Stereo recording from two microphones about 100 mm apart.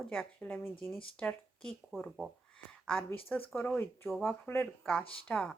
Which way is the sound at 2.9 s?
20° left (ahead or behind).